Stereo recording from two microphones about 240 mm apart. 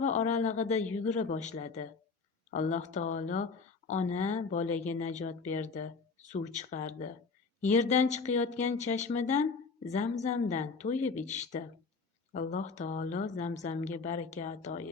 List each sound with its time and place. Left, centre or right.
0.0 s speech: left
12.3 s speech: left